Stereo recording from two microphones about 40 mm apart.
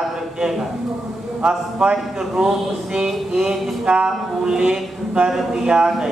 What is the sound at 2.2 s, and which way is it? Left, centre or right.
A man's voice, centre.